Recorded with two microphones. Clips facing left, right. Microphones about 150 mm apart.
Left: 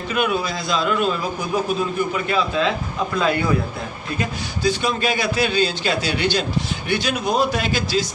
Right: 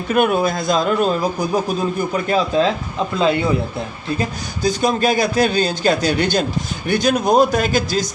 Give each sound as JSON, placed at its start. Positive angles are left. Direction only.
{"t": 0.1, "sound": "a man's voice", "side_deg": -50}
{"t": 3.2, "sound": "a man's voice", "side_deg": -25}
{"t": 4.2, "sound": "a man's voice", "side_deg": -40}